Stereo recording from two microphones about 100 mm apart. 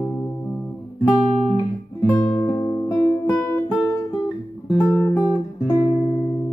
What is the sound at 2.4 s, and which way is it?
Music, 30° left (ahead or behind).